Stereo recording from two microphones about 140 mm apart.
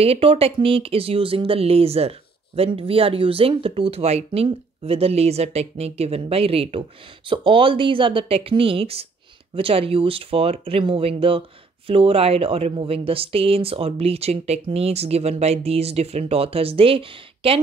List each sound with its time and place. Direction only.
0.0 s speech: 45° right (ahead or behind)